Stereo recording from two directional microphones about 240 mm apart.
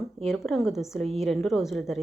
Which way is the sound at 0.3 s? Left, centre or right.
Centre.